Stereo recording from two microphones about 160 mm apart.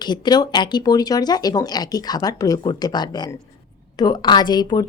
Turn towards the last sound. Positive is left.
turn(degrees=25)  # may be behind; listen again after turning